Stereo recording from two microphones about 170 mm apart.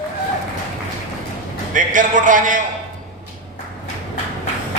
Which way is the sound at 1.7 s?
50° right (ahead or behind).